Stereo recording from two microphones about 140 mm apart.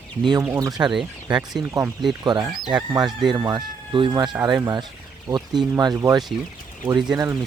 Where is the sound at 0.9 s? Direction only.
5° right (ahead or behind).